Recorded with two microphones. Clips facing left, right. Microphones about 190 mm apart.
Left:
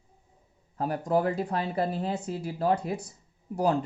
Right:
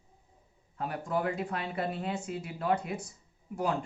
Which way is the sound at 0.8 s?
35° left (ahead or behind).